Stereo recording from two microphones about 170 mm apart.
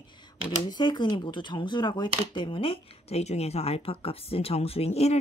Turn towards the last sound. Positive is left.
turn(degrees=40)  # may be behind; listen again after turning